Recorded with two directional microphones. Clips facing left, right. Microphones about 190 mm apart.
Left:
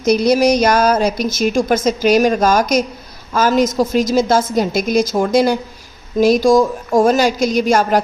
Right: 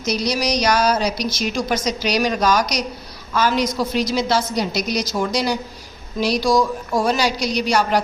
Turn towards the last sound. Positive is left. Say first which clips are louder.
# left 5 dB
turn(degrees=50)  # may be behind; listen again after turning